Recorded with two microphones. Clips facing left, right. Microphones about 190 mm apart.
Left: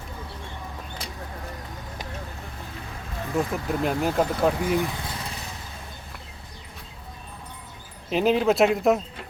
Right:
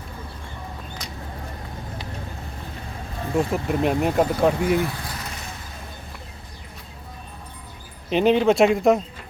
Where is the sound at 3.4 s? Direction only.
30° right (ahead or behind).